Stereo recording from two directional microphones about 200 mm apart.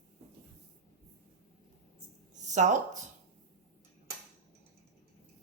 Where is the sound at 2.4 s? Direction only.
35° right (ahead or behind).